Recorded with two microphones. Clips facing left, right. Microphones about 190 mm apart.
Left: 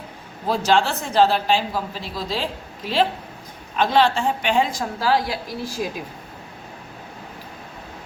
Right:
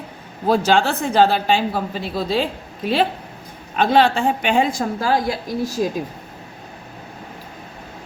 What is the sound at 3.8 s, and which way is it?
A woman's voice, 50° right (ahead or behind).